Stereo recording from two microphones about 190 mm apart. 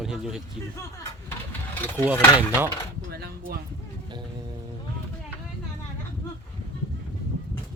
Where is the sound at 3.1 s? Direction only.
55° right (ahead or behind).